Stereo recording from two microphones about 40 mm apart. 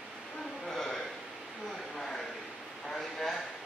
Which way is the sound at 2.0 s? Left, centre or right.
Centre.